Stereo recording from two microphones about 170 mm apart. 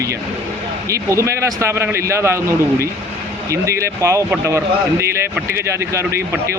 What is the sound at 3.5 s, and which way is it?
Speech, 15° right (ahead or behind).